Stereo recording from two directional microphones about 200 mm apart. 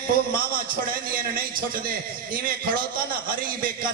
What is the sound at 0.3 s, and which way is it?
A man's voice, 45° right (ahead or behind).